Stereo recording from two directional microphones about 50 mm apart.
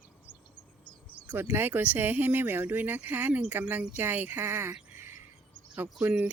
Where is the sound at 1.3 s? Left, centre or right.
Right.